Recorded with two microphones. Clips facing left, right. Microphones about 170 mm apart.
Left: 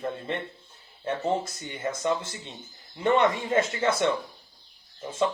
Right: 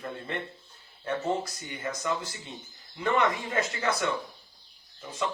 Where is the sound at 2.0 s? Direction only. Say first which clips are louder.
Left 5 dB; 25° left (ahead or behind).